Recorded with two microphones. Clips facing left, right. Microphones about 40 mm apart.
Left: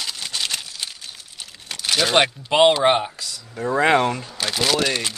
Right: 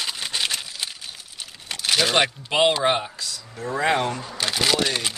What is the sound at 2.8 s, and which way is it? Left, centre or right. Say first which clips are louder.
Speech: left 4 dB; left.